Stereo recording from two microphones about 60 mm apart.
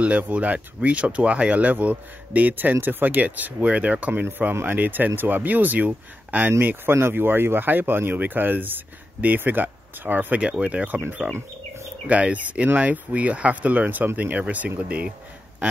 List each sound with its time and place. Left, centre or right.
0.0 s speech: right
6.6 s speech: right
12.1 s speech: right